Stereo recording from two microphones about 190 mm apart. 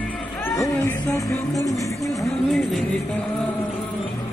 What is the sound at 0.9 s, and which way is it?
Music, 15° left (ahead or behind).